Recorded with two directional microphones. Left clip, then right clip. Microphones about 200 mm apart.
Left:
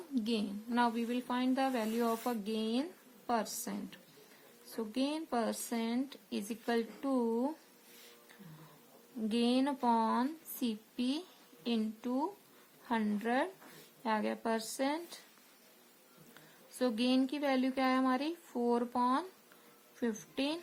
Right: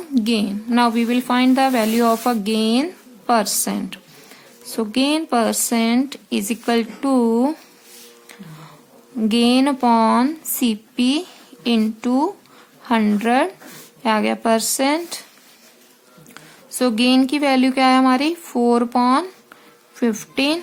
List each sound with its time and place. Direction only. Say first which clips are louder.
0.1 s speech: right 16 dB; 20° right (ahead or behind)
9.3 s speech: right 16 dB; 25° right (ahead or behind)
16.7 s speech: right 16 dB; 25° right (ahead or behind)